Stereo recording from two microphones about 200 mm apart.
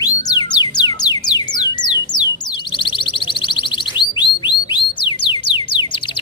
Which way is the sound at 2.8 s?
25° left (ahead or behind).